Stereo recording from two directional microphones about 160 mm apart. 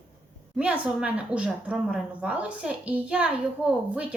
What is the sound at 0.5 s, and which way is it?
A woman's voice, 5° right (ahead or behind).